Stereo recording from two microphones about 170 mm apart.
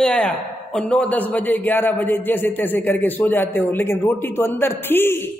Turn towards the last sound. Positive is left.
turn(degrees=15)  # may be behind; listen again after turning